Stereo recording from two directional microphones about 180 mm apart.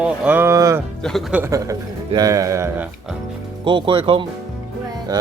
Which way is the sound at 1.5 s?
20° right (ahead or behind).